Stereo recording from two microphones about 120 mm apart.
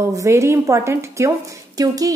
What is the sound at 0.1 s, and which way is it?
A woman's voice, 25° right (ahead or behind).